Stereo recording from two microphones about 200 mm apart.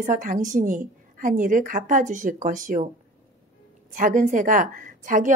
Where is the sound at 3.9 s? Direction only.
40° right (ahead or behind).